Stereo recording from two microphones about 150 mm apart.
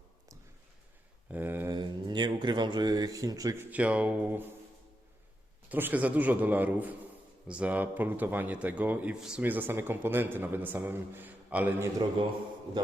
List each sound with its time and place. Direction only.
1.3 s a sound: 15° right (ahead or behind)
1.7 s speech: 30° right (ahead or behind); by 4.4 s 10° right (ahead or behind)
5.6 s a man's voice: 10° right (ahead or behind)